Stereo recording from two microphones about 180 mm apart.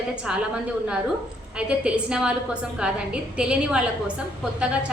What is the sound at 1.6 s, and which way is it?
A woman's voice, 5° right (ahead or behind).